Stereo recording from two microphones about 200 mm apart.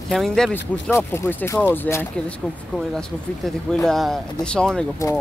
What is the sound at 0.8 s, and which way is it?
Speech, 10° left (ahead or behind).